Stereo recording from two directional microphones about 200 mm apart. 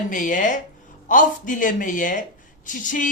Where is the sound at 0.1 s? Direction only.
40° left (ahead or behind).